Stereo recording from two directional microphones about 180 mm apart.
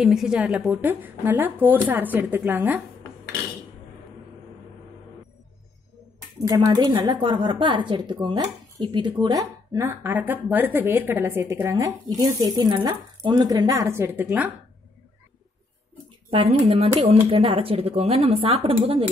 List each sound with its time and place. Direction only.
0.0 s speech: 5° right (ahead or behind)
6.4 s a woman's voice: 20° right (ahead or behind)
16.3 s speech: 30° right (ahead or behind)